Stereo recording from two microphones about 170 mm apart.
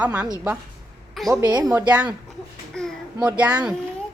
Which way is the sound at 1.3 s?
20° right (ahead or behind).